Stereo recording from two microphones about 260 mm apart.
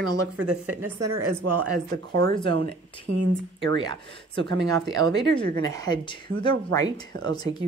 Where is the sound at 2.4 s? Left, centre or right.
Right.